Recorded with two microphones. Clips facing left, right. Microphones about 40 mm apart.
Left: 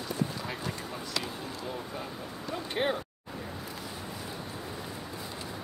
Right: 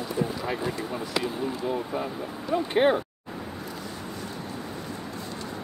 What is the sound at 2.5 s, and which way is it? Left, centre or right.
Speech, right.